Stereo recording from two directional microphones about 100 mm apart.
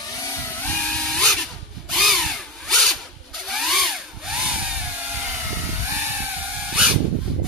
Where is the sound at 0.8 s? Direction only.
5° left (ahead or behind).